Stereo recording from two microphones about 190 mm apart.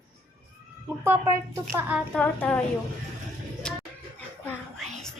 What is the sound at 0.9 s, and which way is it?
Speech, 10° right (ahead or behind).